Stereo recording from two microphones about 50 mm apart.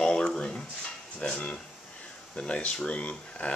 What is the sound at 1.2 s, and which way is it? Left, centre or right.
Speech, left.